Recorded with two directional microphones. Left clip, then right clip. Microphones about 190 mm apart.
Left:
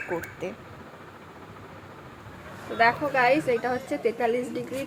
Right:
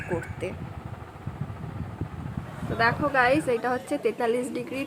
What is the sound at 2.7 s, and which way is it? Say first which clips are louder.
A woman's voice: left 1 dB; 20° right (ahead or behind).